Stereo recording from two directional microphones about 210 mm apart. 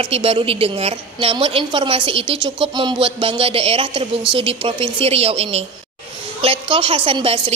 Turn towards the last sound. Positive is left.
turn(degrees=-25)  # may be behind; listen again after turning